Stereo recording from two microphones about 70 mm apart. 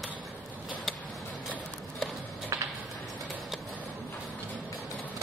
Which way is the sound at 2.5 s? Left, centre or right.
Right.